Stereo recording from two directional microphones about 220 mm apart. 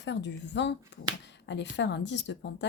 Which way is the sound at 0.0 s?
55° left (ahead or behind).